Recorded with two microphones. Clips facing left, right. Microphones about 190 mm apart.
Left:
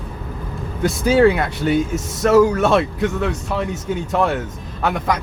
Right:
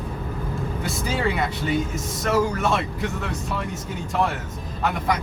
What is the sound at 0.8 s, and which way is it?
Speech, 70° left (ahead or behind).